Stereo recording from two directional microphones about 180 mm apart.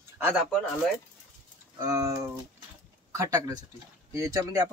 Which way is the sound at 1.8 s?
20° right (ahead or behind).